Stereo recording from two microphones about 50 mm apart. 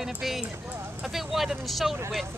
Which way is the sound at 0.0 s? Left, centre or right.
Centre.